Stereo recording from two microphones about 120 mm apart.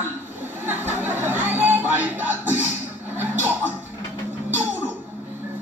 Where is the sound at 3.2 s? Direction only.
15° right (ahead or behind).